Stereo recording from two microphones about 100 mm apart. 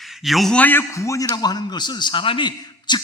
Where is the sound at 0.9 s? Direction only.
30° left (ahead or behind).